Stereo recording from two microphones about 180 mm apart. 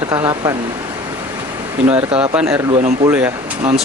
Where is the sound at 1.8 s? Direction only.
5° right (ahead or behind).